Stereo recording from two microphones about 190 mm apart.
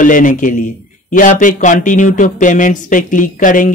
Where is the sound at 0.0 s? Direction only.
45° left (ahead or behind).